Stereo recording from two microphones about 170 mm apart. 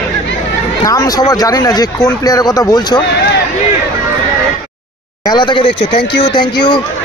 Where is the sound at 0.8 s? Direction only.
20° left (ahead or behind).